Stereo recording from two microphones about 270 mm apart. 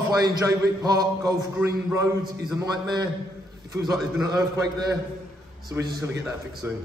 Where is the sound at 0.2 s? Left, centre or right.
Centre.